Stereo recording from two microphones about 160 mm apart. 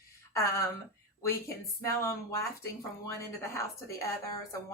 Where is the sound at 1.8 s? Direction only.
20° left (ahead or behind).